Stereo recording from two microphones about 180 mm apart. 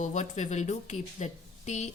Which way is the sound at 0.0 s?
40° left (ahead or behind).